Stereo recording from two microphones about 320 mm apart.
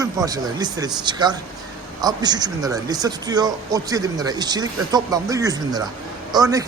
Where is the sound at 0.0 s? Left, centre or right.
Centre.